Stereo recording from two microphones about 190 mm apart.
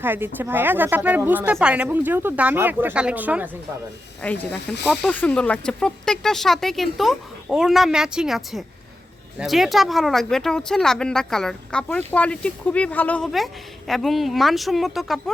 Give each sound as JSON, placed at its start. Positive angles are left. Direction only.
{"t": 0.0, "sound": "a woman's voice", "side_deg": -10}
{"t": 4.2, "sound": "speech", "side_deg": 10}